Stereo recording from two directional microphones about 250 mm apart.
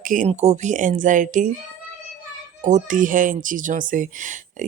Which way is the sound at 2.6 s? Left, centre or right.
Right.